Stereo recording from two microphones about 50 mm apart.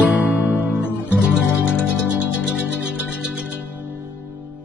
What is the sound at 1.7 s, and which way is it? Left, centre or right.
Music, right.